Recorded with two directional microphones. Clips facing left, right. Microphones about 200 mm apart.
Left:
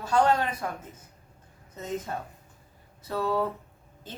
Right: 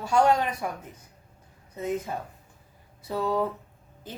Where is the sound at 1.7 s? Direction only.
10° right (ahead or behind).